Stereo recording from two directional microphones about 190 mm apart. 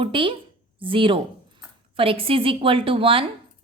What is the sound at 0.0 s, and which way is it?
Speech, 25° right (ahead or behind).